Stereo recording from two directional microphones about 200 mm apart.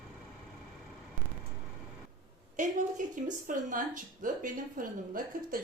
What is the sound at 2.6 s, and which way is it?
A woman's voice, 40° right (ahead or behind).